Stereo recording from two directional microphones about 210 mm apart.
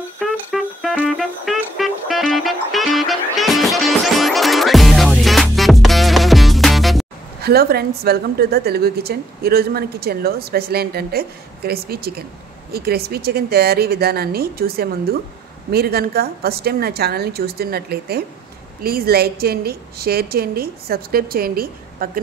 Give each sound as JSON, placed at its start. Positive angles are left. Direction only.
{"t": 0.5, "sound": "music", "side_deg": 0}
{"t": 7.4, "sound": "a woman's voice", "side_deg": -50}